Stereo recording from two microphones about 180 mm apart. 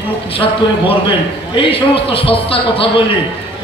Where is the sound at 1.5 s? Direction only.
30° left (ahead or behind).